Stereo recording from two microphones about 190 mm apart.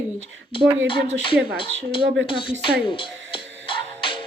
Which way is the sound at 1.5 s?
25° left (ahead or behind).